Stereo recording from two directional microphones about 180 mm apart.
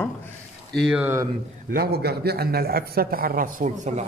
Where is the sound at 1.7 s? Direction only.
60° right (ahead or behind).